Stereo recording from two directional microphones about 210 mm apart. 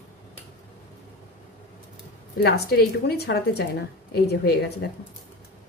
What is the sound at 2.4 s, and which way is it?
Speech, 50° left (ahead or behind).